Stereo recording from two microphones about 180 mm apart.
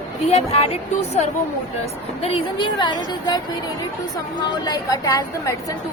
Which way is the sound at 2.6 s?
25° left (ahead or behind).